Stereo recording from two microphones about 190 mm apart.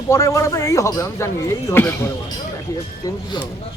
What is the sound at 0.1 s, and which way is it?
Speech, 15° left (ahead or behind).